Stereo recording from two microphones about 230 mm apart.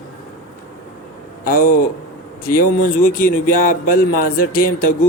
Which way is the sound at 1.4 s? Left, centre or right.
Left.